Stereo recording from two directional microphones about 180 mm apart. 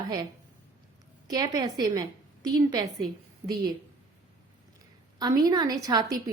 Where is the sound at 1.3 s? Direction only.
20° right (ahead or behind).